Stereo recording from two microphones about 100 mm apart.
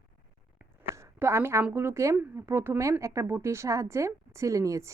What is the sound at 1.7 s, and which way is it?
A woman's voice, 25° right (ahead or behind).